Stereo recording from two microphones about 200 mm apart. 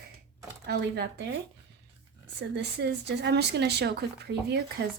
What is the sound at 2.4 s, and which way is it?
Speech, 55° right (ahead or behind).